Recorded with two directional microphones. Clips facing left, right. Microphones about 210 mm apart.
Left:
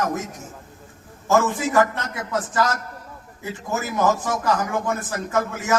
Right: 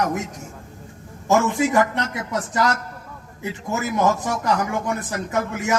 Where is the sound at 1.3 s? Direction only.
20° right (ahead or behind).